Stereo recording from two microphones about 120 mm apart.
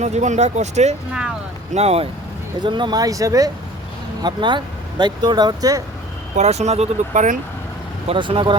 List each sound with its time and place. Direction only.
0.0 s speech: 75° right (ahead or behind)
2.6 s speech: 40° right (ahead or behind)
4.2 s speech: 40° right (ahead or behind)
6.3 s speech: 65° right (ahead or behind); by 7.3 s 90° right
8.0 s speech: 50° right (ahead or behind)